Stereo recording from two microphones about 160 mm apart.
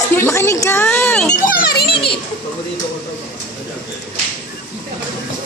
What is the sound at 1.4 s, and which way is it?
Music, 85° left.